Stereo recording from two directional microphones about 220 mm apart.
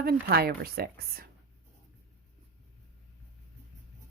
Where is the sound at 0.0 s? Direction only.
45° right (ahead or behind).